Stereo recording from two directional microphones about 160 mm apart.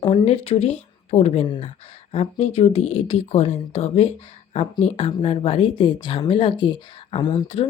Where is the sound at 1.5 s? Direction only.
35° left (ahead or behind).